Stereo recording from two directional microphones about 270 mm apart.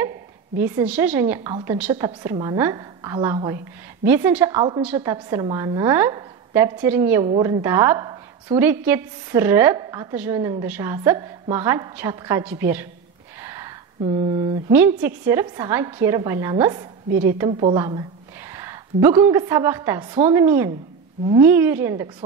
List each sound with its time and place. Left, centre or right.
0.6 s a woman's voice: centre
4.6 s a woman's voice: centre
13.4 s a sound: centre
14.8 s a woman's voice: centre